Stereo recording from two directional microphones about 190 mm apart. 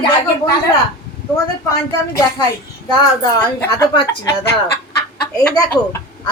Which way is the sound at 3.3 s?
15° left (ahead or behind).